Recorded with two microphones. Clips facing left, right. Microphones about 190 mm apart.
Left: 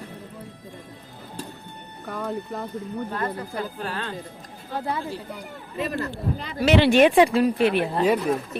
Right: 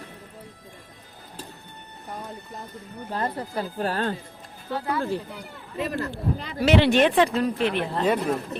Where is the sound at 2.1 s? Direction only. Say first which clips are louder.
Left 8 dB; 70° left (ahead or behind).